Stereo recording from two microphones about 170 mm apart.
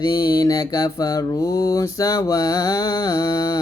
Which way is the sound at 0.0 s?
25° left (ahead or behind).